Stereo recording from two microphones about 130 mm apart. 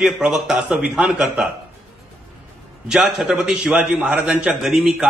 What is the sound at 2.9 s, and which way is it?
A man's voice, centre (ahead or behind).